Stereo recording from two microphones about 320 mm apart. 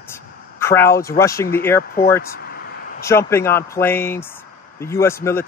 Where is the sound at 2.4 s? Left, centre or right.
Left.